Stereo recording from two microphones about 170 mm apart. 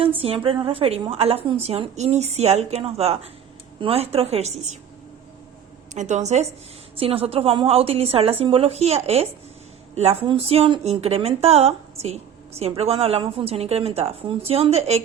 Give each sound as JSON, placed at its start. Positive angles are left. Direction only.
{"t": 0.0, "sound": "a woman's voice", "side_deg": -35}
{"t": 5.9, "sound": "a woman's voice", "side_deg": -45}